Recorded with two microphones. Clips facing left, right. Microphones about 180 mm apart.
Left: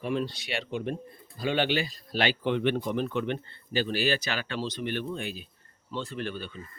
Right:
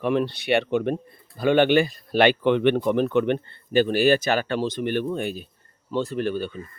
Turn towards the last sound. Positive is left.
turn(degrees=-45)  # may be behind; listen again after turning